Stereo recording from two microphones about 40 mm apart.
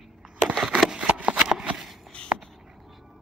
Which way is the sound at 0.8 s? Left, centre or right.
Right.